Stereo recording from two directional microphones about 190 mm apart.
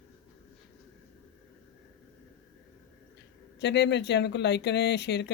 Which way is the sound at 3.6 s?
65° left (ahead or behind).